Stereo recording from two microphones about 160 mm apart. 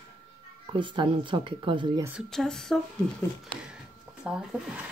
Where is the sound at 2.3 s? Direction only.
5° left (ahead or behind).